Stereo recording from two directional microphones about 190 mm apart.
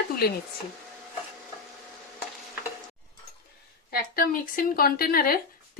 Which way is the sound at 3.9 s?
50° left (ahead or behind).